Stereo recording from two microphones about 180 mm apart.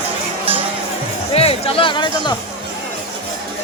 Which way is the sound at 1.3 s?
35° left (ahead or behind).